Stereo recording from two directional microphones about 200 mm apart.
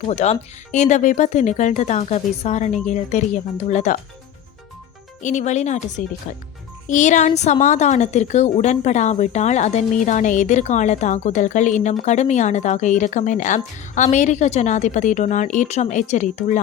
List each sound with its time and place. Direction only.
0.1 s a woman's voice: 35° left (ahead or behind)
5.2 s a woman's voice: 35° left (ahead or behind)